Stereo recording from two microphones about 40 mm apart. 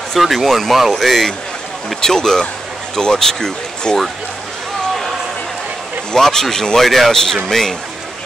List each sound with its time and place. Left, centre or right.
0.1 s speech: centre
2.0 s speech: centre
6.1 s speech: centre